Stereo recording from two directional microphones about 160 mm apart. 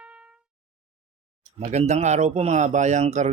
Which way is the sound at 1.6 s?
45° right (ahead or behind).